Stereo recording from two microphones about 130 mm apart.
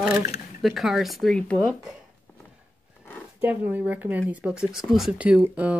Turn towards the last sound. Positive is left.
turn(degrees=-10)  # may be behind; listen again after turning